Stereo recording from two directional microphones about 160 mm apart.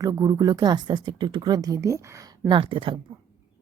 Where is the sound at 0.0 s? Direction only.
20° right (ahead or behind).